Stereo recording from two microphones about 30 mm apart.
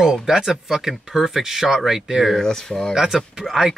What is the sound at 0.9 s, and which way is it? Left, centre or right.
Speech, centre.